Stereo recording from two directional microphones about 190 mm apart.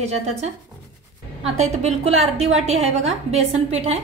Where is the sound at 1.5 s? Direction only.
35° right (ahead or behind).